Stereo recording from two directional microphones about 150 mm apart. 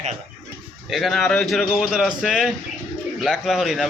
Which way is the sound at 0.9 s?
Centre (ahead or behind).